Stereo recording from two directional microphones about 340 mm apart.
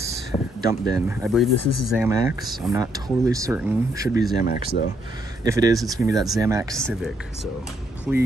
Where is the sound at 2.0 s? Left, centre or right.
Centre.